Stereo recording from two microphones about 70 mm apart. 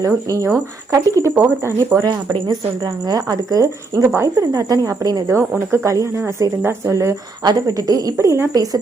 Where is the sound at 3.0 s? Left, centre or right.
Right.